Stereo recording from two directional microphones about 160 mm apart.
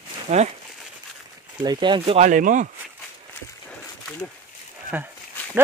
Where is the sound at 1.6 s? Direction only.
30° right (ahead or behind).